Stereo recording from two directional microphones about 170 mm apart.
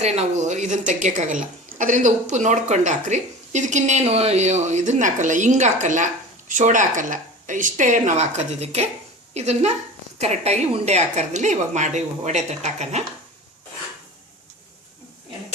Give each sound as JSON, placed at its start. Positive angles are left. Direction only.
{"t": 0.0, "sound": "a woman's voice", "side_deg": -40}